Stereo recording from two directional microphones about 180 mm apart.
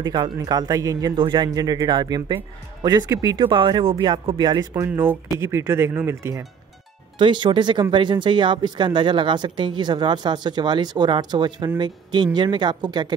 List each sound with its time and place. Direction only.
0.0 s speech: 25° right (ahead or behind)
7.2 s speech: 25° right (ahead or behind)